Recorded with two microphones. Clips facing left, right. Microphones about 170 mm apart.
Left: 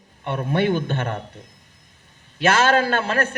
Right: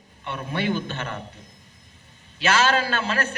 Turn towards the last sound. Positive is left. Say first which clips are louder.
# left 4 dB
turn(degrees=55)  # may be behind; listen again after turning